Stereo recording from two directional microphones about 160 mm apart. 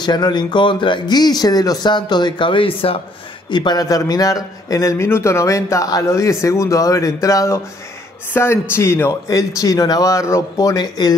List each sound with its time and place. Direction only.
0.0 s a man's voice: 30° left (ahead or behind)